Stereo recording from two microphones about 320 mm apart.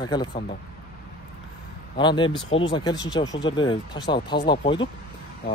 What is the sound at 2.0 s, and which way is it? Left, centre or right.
Speech, centre.